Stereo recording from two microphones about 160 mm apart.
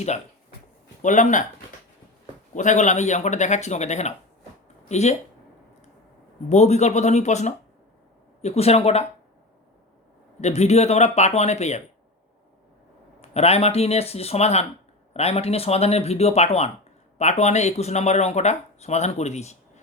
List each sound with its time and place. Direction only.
1.0 s speech: 50° left (ahead or behind)
2.6 s speech: 50° left (ahead or behind)
6.5 s speech: 45° left (ahead or behind)
10.4 s speech: 45° left (ahead or behind)
13.3 s speech: 40° left (ahead or behind)